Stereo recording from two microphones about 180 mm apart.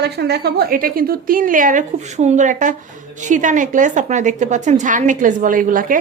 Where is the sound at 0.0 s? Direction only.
65° right (ahead or behind).